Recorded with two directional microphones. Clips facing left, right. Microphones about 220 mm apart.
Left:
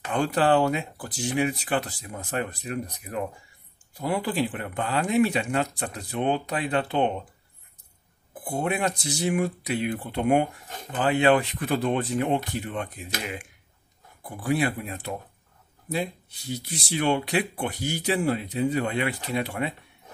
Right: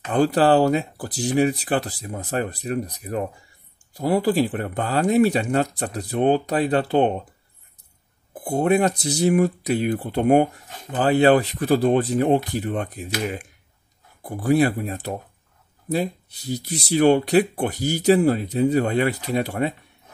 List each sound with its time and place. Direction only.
0.1 s speech: 35° right (ahead or behind)
8.5 s speech: 40° right (ahead or behind)